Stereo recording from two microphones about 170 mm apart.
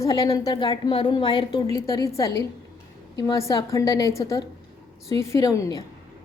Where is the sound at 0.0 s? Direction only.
20° left (ahead or behind).